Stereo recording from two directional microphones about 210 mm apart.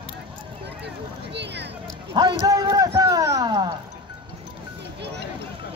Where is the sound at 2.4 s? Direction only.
20° right (ahead or behind).